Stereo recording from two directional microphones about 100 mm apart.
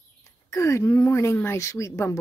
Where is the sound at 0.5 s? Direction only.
30° left (ahead or behind).